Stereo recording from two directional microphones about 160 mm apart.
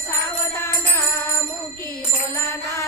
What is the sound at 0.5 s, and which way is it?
Music, 15° left (ahead or behind).